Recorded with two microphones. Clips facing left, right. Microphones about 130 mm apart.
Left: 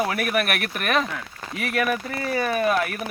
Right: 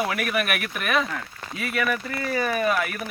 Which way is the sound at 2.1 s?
30° left (ahead or behind).